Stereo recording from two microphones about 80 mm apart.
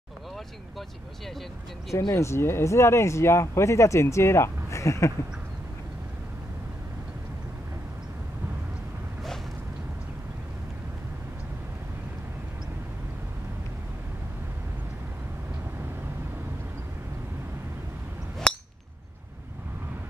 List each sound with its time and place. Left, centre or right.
2.0 s speech: left
18.4 s chink: centre